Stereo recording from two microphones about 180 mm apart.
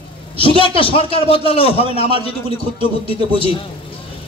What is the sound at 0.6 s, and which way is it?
A man's voice, 30° left (ahead or behind).